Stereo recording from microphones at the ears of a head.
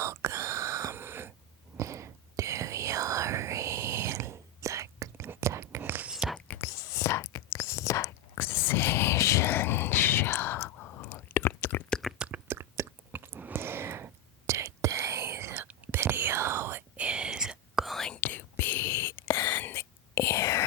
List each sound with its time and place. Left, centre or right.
0.0 s whispering: right
6.5 s whispering: left
12.3 s chewing: right
18.0 s whispering: left